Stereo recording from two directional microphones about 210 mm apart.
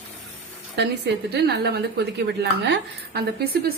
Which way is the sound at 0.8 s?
50° right (ahead or behind).